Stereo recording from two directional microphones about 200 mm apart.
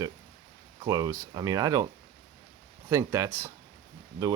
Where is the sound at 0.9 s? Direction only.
20° right (ahead or behind).